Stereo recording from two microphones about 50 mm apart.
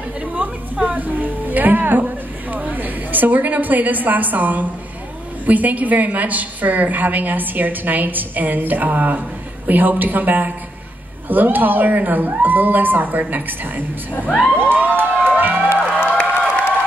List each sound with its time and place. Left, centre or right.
0.2 s a woman's voice: right
14.1 s crowd: left
14.5 s a woman's voice: right
15.2 s music: right
16.2 s a sound: left